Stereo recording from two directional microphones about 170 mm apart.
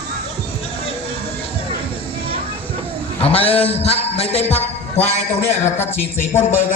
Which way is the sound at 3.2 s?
35° left (ahead or behind).